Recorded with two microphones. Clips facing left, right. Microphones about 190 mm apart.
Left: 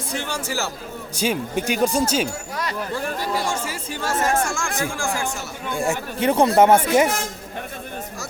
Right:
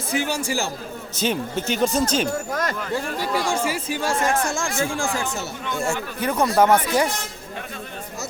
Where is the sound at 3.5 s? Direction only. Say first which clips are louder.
Right 4 dB; 10° right (ahead or behind).